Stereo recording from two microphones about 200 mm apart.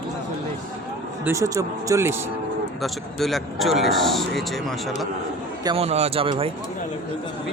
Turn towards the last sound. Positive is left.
turn(degrees=-25)  # may be behind; listen again after turning